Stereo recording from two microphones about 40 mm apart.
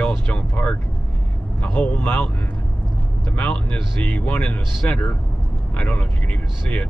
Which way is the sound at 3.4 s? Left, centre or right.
Left.